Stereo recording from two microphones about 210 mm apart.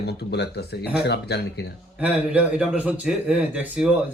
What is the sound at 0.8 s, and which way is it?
Speech, 5° right (ahead or behind).